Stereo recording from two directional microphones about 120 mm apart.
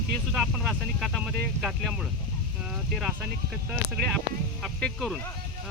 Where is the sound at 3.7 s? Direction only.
Centre (ahead or behind).